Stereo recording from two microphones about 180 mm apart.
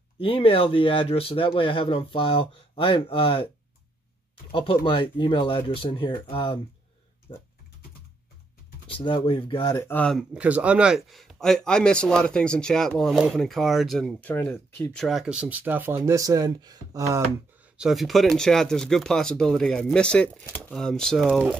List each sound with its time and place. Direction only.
0.2 s speech: 30° left (ahead or behind)
4.5 s speech: 30° left (ahead or behind)
8.9 s speech: 30° left (ahead or behind)
9.8 s speech: 5° left (ahead or behind)
10.3 s speech: 5° right (ahead or behind)
17.7 s speech: centre (ahead or behind)